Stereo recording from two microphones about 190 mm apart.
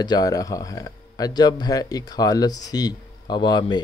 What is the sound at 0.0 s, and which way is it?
Speech, 20° left (ahead or behind).